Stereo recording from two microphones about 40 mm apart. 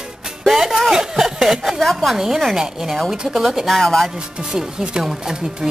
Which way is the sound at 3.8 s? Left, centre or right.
Centre.